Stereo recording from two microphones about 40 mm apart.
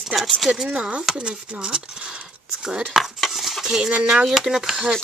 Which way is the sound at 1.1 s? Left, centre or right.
Right.